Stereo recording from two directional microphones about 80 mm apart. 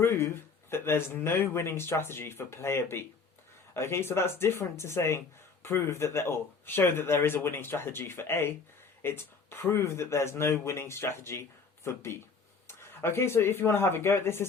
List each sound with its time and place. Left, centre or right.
0.0 s speech: left